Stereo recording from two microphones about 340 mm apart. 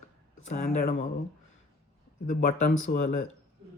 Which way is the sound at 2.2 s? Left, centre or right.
Left.